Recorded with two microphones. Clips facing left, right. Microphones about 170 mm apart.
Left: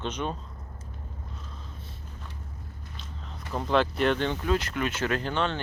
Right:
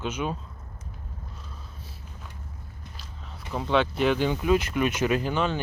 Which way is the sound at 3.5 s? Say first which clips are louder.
Right 1 dB; centre (ahead or behind).